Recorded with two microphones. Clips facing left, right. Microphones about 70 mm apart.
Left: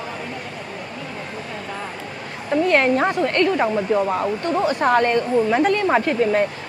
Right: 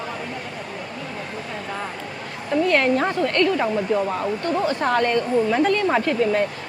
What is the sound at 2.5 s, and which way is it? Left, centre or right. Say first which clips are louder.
A woman's voice: left 2 dB; left.